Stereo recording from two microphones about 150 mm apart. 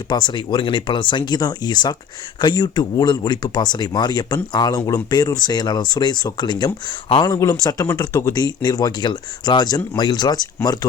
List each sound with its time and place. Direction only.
0.1 s speech: 30° left (ahead or behind)